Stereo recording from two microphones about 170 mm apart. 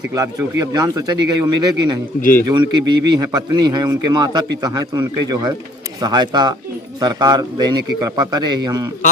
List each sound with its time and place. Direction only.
0.1 s speech: 20° right (ahead or behind)